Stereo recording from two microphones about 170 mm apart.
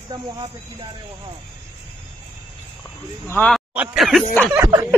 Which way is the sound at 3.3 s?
10° left (ahead or behind).